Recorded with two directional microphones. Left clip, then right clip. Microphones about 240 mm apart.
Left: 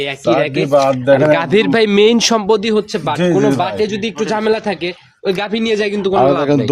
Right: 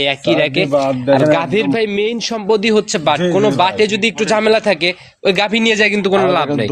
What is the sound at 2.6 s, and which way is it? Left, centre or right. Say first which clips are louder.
Speech: right 2 dB; centre.